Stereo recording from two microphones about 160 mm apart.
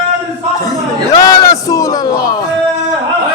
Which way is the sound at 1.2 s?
20° left (ahead or behind).